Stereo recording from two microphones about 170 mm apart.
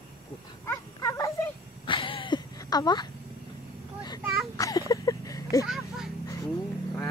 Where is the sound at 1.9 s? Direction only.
30° left (ahead or behind).